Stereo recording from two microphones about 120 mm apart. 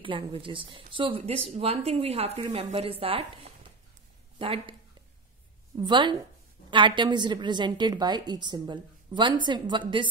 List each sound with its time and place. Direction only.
0.0 s speech: 45° right (ahead or behind)
5.8 s a woman's voice: 40° right (ahead or behind)